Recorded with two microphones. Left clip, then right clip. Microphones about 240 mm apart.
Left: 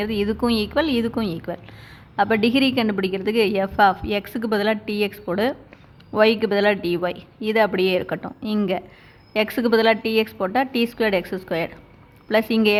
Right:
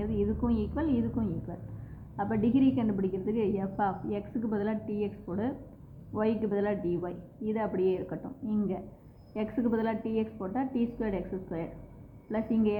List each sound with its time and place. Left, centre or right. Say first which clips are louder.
0.0 s a woman's voice: left 9 dB; left